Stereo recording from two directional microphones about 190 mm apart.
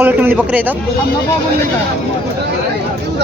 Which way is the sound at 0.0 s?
10° right (ahead or behind).